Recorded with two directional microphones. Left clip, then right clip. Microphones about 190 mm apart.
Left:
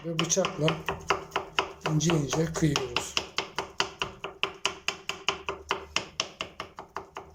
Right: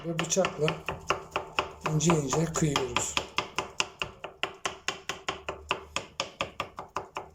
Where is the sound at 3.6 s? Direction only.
Centre (ahead or behind).